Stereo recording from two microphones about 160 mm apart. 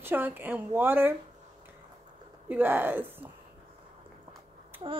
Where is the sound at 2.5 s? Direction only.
15° right (ahead or behind).